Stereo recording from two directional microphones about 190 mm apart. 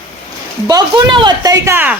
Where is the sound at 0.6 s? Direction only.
20° right (ahead or behind).